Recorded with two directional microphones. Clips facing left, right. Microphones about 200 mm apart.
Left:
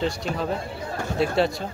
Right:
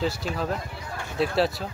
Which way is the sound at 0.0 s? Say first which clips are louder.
Left 2 dB; centre (ahead or behind).